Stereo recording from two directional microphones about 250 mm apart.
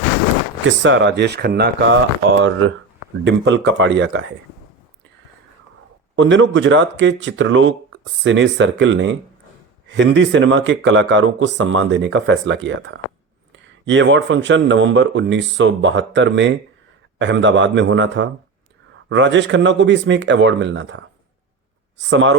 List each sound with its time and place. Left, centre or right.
0.8 s speech: right
3.2 s speech: right
6.1 s speech: right